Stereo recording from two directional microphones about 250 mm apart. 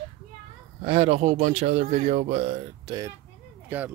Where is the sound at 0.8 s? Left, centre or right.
Right.